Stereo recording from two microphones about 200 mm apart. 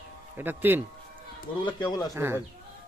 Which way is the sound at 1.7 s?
20° left (ahead or behind).